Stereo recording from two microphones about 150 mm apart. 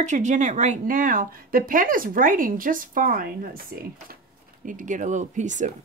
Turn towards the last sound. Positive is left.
turn(degrees=-55)  # may be behind; listen again after turning